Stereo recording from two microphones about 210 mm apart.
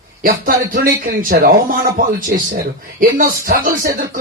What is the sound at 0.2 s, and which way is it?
A man's voice, 40° right (ahead or behind).